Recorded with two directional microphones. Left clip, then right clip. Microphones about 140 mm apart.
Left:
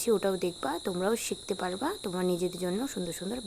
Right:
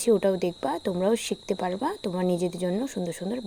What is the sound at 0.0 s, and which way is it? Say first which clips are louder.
Speech: right 5 dB; 15° right (ahead or behind).